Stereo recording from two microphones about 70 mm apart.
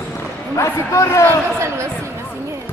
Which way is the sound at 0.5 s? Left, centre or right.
Left.